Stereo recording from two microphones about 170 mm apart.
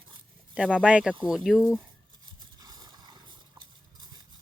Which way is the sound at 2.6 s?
20° right (ahead or behind).